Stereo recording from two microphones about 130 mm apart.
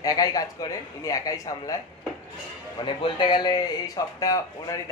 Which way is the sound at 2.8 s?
35° left (ahead or behind).